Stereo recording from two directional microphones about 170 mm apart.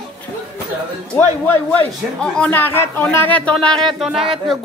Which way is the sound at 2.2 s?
5° left (ahead or behind).